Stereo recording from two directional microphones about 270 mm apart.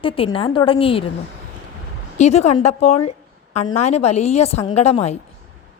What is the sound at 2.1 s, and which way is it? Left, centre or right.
A woman's voice, left.